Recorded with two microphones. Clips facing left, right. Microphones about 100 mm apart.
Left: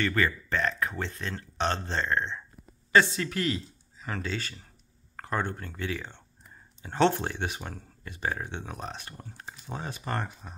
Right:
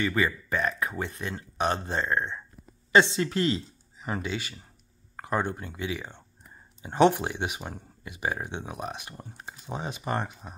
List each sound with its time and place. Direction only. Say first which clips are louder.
0.0 s speech: right 1 dB; 10° right (ahead or behind)
2.9 s speech: right 2 dB; 25° right (ahead or behind)